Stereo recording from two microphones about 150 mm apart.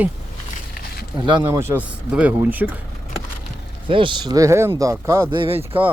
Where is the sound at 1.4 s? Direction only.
15° right (ahead or behind).